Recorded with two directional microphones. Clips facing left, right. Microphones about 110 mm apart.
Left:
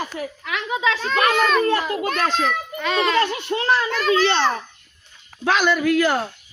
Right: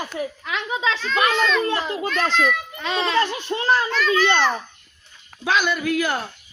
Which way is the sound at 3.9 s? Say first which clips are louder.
Left 1 dB; 45° left (ahead or behind).